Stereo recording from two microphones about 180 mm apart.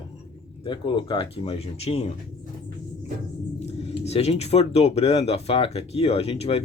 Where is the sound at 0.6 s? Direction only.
25° left (ahead or behind).